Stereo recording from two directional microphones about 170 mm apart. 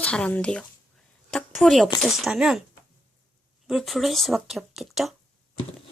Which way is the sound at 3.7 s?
Centre (ahead or behind).